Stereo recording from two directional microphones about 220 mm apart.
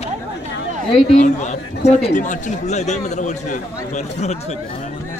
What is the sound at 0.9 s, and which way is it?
Speech, 35° left (ahead or behind).